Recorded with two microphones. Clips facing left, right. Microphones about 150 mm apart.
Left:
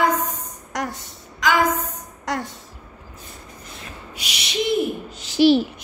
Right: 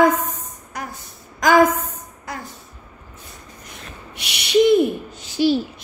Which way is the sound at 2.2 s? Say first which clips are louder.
Left 6 dB; 90° left.